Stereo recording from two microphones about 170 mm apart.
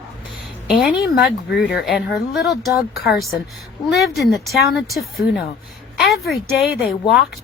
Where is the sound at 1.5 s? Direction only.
75° left (ahead or behind).